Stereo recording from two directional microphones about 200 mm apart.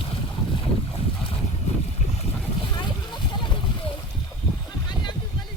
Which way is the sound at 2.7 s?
20° left (ahead or behind).